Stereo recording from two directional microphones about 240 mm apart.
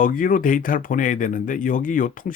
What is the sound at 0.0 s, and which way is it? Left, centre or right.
Speech, left.